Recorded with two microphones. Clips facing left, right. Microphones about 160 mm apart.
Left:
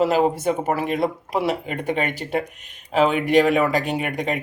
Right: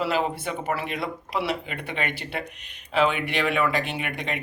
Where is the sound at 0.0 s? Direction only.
45° left (ahead or behind).